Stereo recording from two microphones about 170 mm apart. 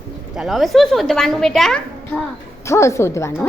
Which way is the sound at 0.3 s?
Centre (ahead or behind).